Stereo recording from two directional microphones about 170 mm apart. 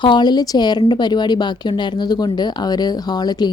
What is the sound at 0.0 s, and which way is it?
Speech, 25° left (ahead or behind).